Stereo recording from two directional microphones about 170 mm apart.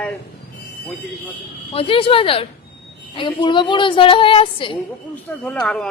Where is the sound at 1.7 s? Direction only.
35° left (ahead or behind).